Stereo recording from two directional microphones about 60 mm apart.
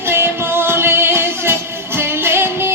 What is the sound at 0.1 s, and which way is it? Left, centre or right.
Music, right.